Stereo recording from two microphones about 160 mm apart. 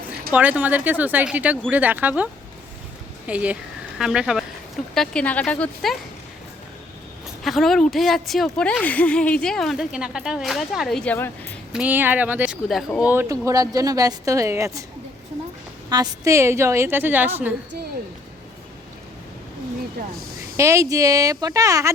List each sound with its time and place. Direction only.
0.3 s a woman's voice: 10° right (ahead or behind)
4.9 s speech: 5° left (ahead or behind)
7.4 s speech: centre (ahead or behind)
11.7 s a woman's voice: 10° right (ahead or behind)
12.6 s speech: 5° left (ahead or behind)
13.1 s speech: 15° right (ahead or behind)
15.9 s a woman's voice: 20° right (ahead or behind)
20.6 s speech: 20° right (ahead or behind)